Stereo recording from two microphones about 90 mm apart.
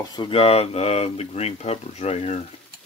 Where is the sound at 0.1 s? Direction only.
75° left (ahead or behind).